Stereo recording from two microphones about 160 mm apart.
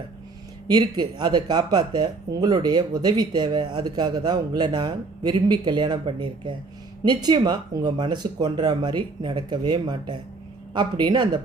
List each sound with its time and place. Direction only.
0.7 s speech: 25° right (ahead or behind)